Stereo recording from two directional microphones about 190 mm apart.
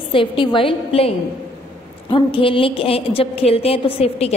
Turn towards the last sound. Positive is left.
turn(degrees=30)  # may be behind; listen again after turning